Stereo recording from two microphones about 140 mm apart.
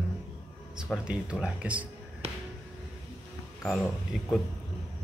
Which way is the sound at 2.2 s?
45° right (ahead or behind).